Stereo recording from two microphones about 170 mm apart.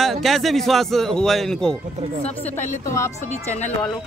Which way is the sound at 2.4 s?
15° left (ahead or behind).